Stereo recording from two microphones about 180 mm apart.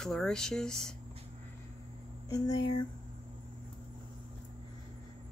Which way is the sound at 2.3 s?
20° left (ahead or behind).